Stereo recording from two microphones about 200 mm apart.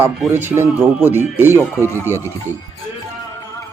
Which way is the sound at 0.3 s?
10° right (ahead or behind).